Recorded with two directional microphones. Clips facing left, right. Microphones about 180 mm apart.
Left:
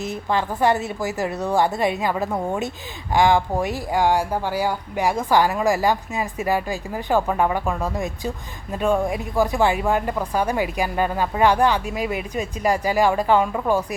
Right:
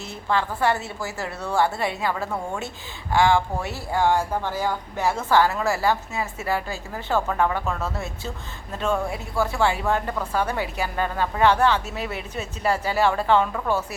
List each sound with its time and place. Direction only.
0.0 s speech: 15° left (ahead or behind)